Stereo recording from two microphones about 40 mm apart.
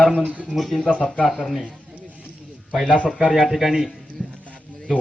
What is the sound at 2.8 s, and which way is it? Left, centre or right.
Speech, right.